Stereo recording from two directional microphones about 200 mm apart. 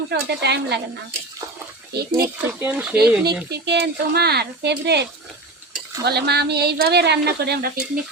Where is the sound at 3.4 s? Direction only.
55° right (ahead or behind).